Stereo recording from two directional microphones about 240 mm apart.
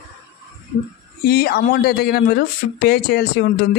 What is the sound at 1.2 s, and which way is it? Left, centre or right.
Speech, left.